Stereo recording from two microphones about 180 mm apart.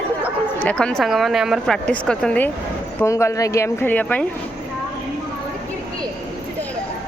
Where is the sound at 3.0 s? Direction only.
15° left (ahead or behind).